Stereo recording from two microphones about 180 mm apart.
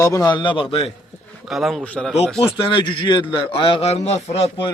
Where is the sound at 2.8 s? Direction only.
25° left (ahead or behind).